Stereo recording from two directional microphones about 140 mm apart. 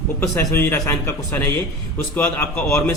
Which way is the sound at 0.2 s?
15° left (ahead or behind).